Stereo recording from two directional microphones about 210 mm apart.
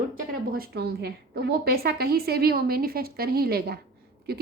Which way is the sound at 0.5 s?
50° right (ahead or behind).